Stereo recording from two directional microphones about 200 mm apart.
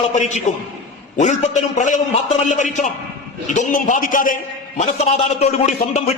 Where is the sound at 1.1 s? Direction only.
35° left (ahead or behind).